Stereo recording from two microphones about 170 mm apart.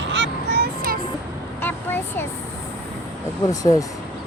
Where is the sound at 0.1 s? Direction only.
80° right; by 0.9 s 65° right (ahead or behind).